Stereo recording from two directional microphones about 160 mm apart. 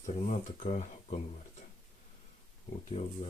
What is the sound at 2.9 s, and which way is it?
Speech, 35° left (ahead or behind).